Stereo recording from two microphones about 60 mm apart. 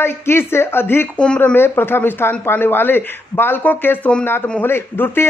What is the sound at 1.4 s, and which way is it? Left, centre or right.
Speech, left.